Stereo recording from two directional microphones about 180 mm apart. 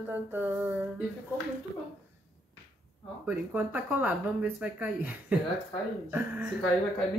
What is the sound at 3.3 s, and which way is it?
Speech, 10° right (ahead or behind).